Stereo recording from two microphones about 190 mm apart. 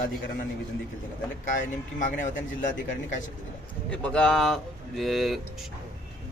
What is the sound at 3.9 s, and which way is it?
Speech, 5° left (ahead or behind).